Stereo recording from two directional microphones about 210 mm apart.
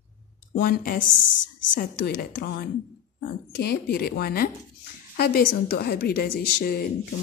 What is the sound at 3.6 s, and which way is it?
Speech, 50° left (ahead or behind).